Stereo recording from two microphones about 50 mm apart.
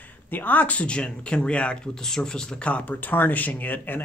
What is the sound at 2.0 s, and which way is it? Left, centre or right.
Speech, centre.